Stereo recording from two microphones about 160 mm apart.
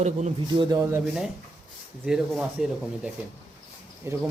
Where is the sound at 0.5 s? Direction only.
30° right (ahead or behind).